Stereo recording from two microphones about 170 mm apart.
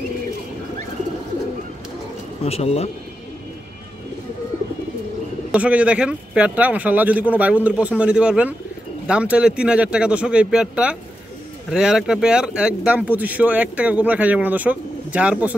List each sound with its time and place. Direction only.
2.4 s speech: 35° left (ahead or behind)
5.5 s speech: 10° right (ahead or behind)